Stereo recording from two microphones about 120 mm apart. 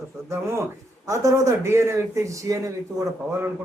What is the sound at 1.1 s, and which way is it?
Speech, 25° right (ahead or behind).